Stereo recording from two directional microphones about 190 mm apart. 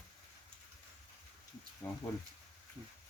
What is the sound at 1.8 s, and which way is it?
Speech, 10° left (ahead or behind).